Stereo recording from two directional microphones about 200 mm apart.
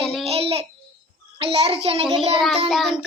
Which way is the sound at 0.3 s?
30° right (ahead or behind).